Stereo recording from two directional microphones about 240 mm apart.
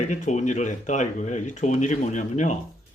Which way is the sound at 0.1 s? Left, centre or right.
Left.